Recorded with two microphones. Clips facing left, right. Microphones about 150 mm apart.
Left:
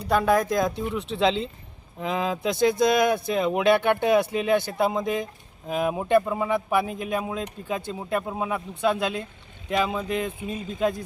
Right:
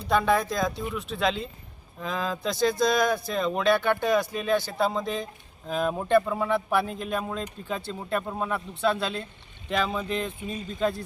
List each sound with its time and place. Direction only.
0.0 s speech: 10° left (ahead or behind)